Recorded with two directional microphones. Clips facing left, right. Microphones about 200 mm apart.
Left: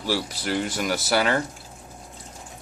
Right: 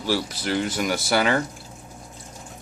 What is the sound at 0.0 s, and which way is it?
Speech, 5° left (ahead or behind).